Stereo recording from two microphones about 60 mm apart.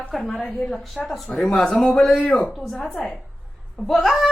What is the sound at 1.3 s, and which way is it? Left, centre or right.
A woman's voice, centre.